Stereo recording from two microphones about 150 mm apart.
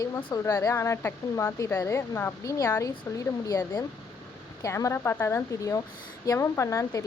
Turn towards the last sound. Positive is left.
turn(degrees=20)  # may be behind; listen again after turning